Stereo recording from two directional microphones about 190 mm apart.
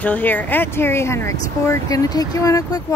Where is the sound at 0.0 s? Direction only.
10° left (ahead or behind).